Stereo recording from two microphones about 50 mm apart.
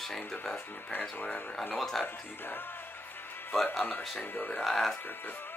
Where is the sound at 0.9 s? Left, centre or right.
Left.